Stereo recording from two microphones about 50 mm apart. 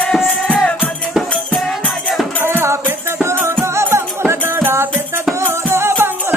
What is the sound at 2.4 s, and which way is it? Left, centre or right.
Music, right.